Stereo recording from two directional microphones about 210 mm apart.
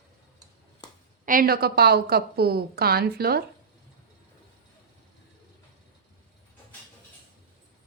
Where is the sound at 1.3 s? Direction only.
45° right (ahead or behind).